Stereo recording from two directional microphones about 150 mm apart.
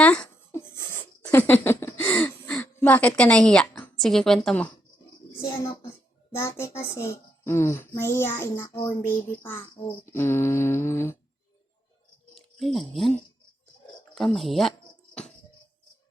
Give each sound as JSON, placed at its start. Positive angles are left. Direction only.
{"t": 0.0, "sound": "a sound", "side_deg": 10}
{"t": 6.3, "sound": "speech", "side_deg": 20}
{"t": 10.1, "sound": "speech", "side_deg": 15}
{"t": 12.3, "sound": "speech", "side_deg": 0}
{"t": 14.2, "sound": "speech", "side_deg": 0}